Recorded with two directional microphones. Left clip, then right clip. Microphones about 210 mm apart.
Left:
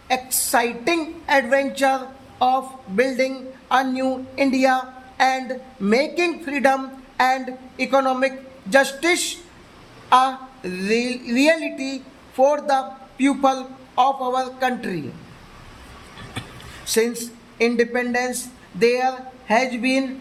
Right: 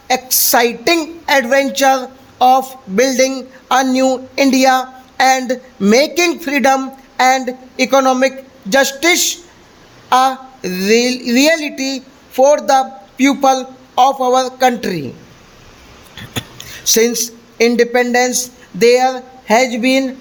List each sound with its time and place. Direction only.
0.1 s a woman's voice: 45° right (ahead or behind)
16.8 s speech: 45° right (ahead or behind)